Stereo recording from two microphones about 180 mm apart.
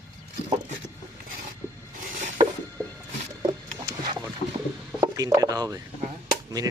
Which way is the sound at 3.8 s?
25° right (ahead or behind).